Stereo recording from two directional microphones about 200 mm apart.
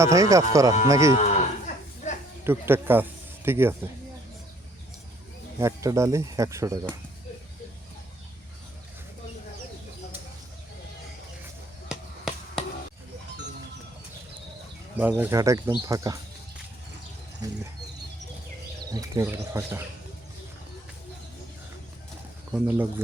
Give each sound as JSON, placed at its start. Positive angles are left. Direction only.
{"t": 0.0, "sound": "speech", "side_deg": -15}
{"t": 1.1, "sound": "moo", "side_deg": 35}
{"t": 2.4, "sound": "speech", "side_deg": -10}
{"t": 5.5, "sound": "speech", "side_deg": -15}
{"t": 14.9, "sound": "speech", "side_deg": -10}
{"t": 18.9, "sound": "speech", "side_deg": -20}
{"t": 22.5, "sound": "speech", "side_deg": -10}